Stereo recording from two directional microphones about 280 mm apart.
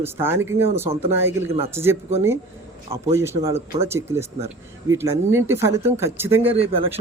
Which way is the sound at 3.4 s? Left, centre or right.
Centre.